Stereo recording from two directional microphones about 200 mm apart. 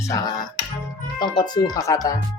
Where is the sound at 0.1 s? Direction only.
20° left (ahead or behind).